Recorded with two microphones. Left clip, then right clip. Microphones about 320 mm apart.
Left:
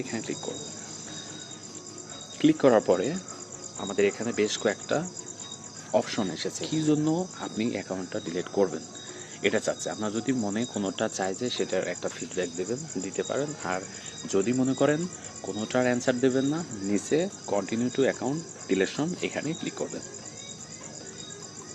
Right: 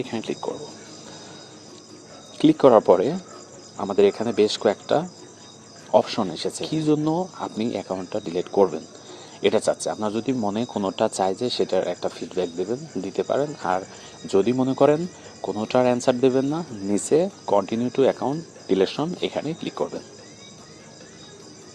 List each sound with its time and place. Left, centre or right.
0.0 s speech: right
2.4 s speech: right
6.1 s speech: centre